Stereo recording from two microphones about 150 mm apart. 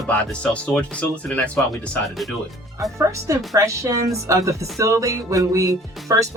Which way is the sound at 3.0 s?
20° right (ahead or behind).